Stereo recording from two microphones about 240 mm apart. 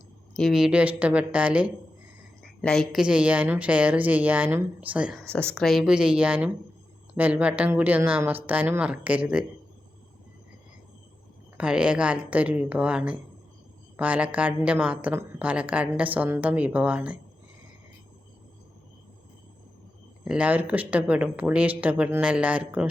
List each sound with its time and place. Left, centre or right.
0.3 s a woman's voice: centre
11.5 s a woman's voice: centre
20.2 s a woman's voice: centre